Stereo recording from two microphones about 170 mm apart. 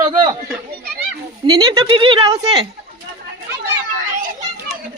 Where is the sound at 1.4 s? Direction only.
25° right (ahead or behind).